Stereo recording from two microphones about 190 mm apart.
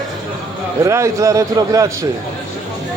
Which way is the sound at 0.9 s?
15° right (ahead or behind).